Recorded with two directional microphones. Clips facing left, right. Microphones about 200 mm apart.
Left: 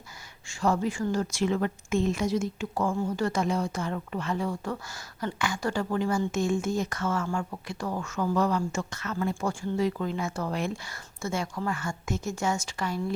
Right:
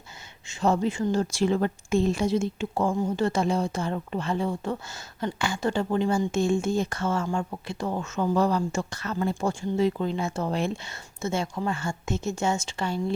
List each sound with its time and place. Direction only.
0.4 s a woman's voice: 20° right (ahead or behind)